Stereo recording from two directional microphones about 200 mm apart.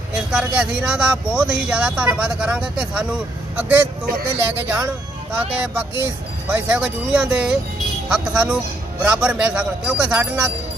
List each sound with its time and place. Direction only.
0.3 s speech: 5° right (ahead or behind)